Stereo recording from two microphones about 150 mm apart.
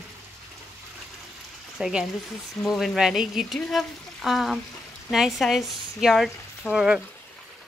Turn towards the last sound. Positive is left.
turn(degrees=-5)  # may be behind; listen again after turning